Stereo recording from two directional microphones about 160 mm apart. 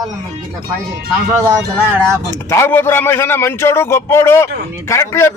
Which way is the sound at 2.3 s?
15° left (ahead or behind).